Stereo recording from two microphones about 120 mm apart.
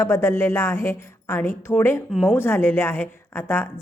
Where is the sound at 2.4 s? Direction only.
20° left (ahead or behind).